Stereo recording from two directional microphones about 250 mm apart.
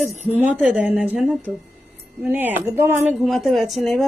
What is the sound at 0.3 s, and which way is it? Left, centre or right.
Speech, centre.